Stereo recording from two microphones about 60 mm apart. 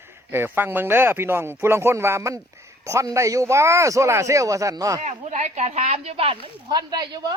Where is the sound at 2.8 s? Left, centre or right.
Right.